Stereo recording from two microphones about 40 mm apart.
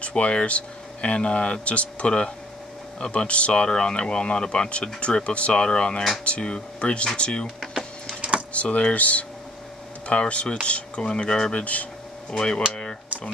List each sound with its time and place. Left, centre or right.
0.0 s speech: left
8.2 s a sound: right
8.5 s speech: left
11.6 s speech: left
12.3 s speech: left